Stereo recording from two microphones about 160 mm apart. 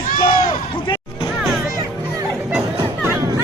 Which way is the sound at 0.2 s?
35° left (ahead or behind).